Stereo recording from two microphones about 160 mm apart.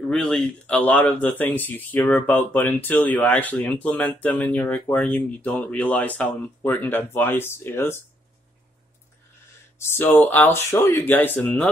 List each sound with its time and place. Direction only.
0.1 s speech: 5° left (ahead or behind)
9.8 s speech: 15° left (ahead or behind)